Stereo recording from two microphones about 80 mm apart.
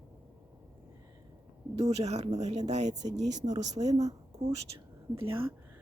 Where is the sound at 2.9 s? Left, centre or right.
Right.